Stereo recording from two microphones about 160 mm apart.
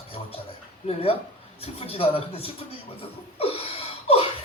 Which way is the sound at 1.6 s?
35° left (ahead or behind).